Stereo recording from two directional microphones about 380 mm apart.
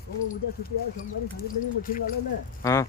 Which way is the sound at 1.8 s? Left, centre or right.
Left.